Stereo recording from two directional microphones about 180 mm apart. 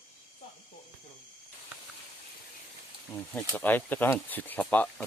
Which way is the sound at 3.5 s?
10° left (ahead or behind).